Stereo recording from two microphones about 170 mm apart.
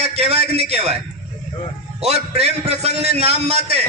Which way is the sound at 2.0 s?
35° right (ahead or behind).